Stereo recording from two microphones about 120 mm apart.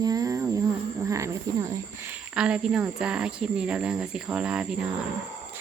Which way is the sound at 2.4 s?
10° right (ahead or behind).